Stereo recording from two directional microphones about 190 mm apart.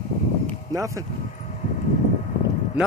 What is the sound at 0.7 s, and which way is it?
Speech, 15° right (ahead or behind).